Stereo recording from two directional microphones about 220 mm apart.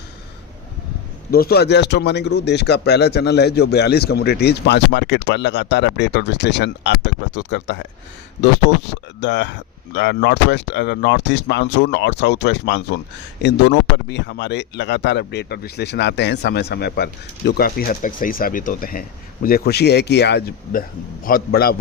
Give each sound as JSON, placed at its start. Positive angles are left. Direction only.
{"t": 1.3, "sound": "speech", "side_deg": 45}